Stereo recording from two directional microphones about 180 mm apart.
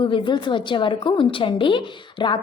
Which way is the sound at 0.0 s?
25° left (ahead or behind).